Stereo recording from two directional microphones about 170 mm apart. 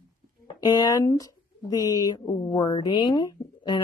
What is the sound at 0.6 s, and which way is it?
Speech, 25° left (ahead or behind).